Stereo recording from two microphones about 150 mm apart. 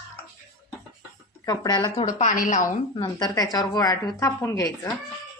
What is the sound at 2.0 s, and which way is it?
Speech, 60° left (ahead or behind).